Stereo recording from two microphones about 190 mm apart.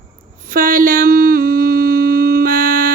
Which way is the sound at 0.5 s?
45° right (ahead or behind).